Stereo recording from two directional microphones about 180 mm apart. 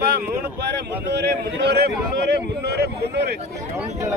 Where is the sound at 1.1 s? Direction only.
65° right (ahead or behind).